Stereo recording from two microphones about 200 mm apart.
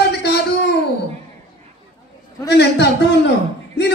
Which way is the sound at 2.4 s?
55° left (ahead or behind).